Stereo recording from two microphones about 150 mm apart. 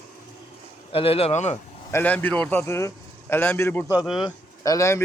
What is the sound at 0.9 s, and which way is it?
Speech, 40° left (ahead or behind).